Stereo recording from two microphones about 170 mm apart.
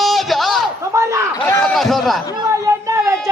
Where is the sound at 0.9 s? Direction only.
15° right (ahead or behind).